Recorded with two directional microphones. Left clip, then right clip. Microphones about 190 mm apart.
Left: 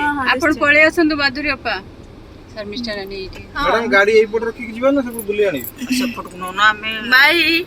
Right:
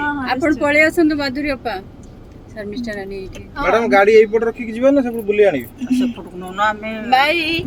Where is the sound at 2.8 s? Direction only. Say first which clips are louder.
Left 1 dB; 30° right (ahead or behind).